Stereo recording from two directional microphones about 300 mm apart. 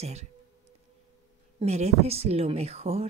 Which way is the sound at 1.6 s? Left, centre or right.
Right.